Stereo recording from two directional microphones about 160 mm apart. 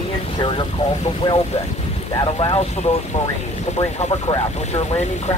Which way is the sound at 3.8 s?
30° left (ahead or behind).